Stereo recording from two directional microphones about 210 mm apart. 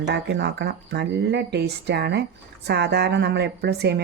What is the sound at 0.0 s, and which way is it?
Speech, 55° right (ahead or behind).